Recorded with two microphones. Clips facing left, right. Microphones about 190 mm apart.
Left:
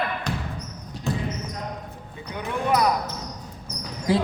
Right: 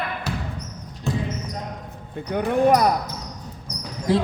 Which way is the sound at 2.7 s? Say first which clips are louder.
Right 2 dB; 45° right (ahead or behind).